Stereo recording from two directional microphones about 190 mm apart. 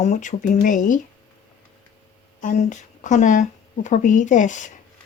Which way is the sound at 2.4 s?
40° left (ahead or behind).